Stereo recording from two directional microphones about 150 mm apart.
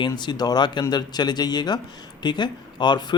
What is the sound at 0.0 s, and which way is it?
Speech, 30° left (ahead or behind).